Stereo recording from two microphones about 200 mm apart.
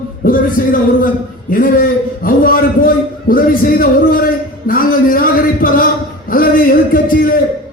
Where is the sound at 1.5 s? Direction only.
45° left (ahead or behind).